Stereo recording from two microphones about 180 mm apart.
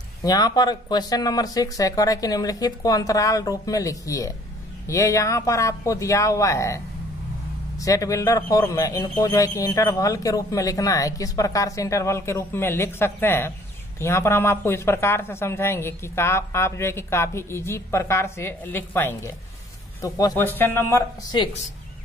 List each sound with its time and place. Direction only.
0.2 s speech: 20° left (ahead or behind)